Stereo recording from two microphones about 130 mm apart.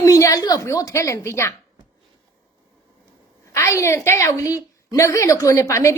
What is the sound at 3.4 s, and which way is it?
A woman's voice, 20° left (ahead or behind).